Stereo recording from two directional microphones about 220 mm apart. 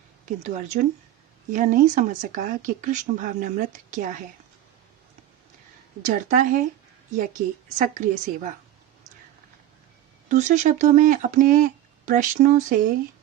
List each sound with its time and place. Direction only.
0.3 s speech: 35° right (ahead or behind)
6.1 s speech: 35° right (ahead or behind)
10.2 s speech: 35° right (ahead or behind)